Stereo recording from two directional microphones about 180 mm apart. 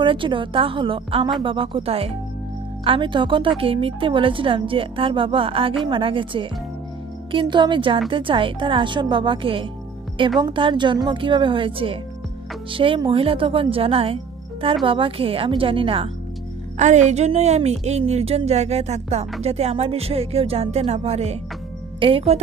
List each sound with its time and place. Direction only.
0.0 s a woman's voice: 30° right (ahead or behind)
16.7 s a woman's voice: 40° right (ahead or behind)